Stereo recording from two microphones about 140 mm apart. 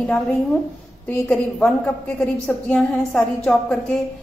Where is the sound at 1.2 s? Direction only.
10° left (ahead or behind).